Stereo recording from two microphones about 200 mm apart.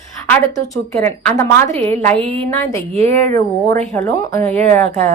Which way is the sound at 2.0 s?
30° right (ahead or behind).